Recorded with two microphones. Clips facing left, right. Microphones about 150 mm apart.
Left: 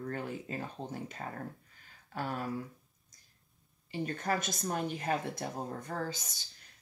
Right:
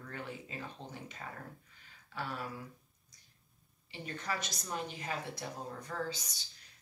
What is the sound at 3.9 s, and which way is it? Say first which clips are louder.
Speech: left 7 dB; 50° left (ahead or behind).